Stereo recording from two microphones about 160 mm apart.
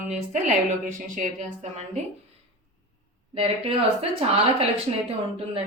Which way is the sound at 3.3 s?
35° right (ahead or behind).